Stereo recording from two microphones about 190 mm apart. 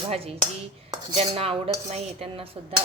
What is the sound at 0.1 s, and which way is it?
Cutlery, 30° right (ahead or behind).